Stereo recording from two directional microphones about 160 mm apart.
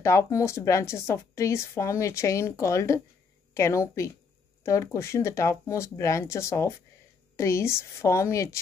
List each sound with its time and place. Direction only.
0.0 s a woman's voice: 20° left (ahead or behind)